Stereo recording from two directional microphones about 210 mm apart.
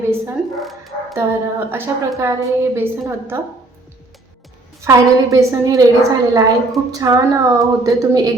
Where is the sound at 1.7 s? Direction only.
10° right (ahead or behind).